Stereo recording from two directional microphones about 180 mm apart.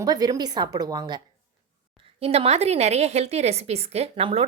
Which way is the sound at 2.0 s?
35° right (ahead or behind).